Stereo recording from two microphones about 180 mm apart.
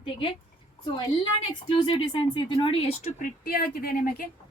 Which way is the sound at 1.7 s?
30° left (ahead or behind).